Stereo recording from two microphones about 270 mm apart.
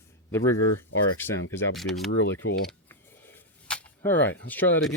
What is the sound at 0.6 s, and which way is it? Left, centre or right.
Speech, left.